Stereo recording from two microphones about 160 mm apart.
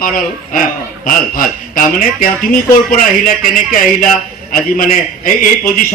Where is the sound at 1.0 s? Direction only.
60° left (ahead or behind).